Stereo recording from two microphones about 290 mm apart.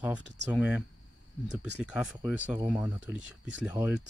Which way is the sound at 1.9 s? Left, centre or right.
Centre.